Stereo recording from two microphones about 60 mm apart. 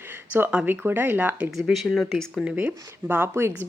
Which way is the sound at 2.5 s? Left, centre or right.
Right.